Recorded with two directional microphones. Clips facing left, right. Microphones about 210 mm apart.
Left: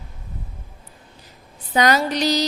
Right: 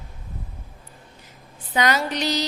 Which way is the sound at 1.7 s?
40° left (ahead or behind).